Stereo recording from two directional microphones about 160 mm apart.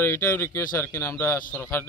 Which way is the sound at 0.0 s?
15° left (ahead or behind).